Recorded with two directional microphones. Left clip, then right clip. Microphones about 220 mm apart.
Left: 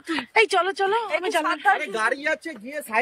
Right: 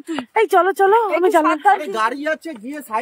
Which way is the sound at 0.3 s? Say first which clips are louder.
Right 5 dB; 20° right (ahead or behind).